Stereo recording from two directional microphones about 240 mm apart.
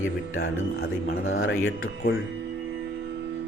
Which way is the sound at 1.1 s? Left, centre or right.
Left.